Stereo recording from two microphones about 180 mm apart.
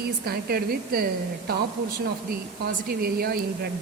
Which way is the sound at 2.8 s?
60° right (ahead or behind).